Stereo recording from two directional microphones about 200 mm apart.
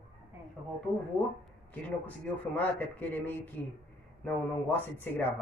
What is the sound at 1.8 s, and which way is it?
Speech, 10° left (ahead or behind).